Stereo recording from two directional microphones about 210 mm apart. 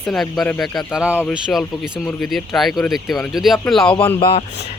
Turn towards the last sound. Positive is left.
turn(degrees=25)  # may be behind; listen again after turning